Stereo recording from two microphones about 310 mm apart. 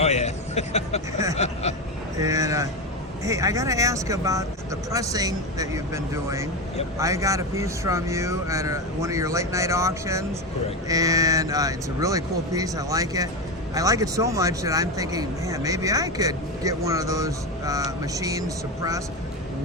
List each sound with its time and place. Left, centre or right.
0.0 s a man's voice: left
2.1 s speech: centre